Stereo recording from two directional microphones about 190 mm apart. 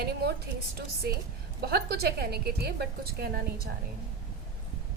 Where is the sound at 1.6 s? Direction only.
60° right (ahead or behind).